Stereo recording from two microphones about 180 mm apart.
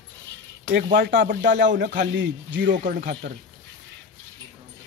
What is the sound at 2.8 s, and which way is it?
Speech, 55° right (ahead or behind).